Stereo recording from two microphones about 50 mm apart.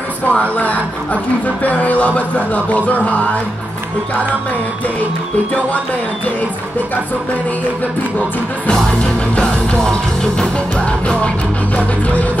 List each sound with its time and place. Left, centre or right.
0.3 s speech: left
10.9 s music: centre